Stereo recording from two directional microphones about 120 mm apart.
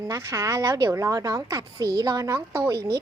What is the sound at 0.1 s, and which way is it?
A woman's voice, 25° right (ahead or behind).